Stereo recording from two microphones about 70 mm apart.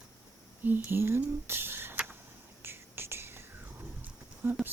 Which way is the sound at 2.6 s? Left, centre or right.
Right.